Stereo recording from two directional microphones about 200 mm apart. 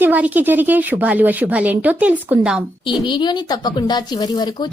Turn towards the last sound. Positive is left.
turn(degrees=20)  # may be behind; listen again after turning